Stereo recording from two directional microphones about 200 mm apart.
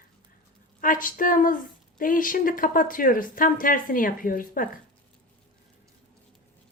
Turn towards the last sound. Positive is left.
turn(degrees=45)  # may be behind; listen again after turning